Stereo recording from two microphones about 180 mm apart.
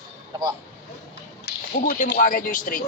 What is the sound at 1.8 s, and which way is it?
Speech, 50° left (ahead or behind).